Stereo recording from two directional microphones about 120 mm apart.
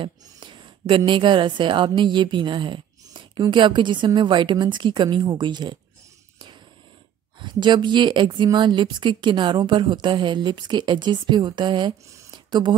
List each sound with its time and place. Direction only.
0.0 s a woman's voice: 40° right (ahead or behind)
7.3 s a woman's voice: 40° right (ahead or behind)
12.1 s a sound: 35° right (ahead or behind)